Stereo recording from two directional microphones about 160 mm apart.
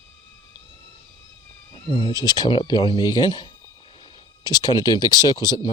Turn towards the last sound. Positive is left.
turn(degrees=25)  # may be behind; listen again after turning